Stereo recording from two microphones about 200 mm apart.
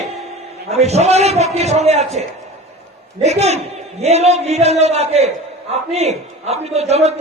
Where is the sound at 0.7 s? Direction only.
35° right (ahead or behind).